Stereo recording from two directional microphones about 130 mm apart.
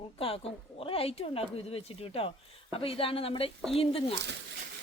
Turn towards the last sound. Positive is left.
turn(degrees=45)  # may be behind; listen again after turning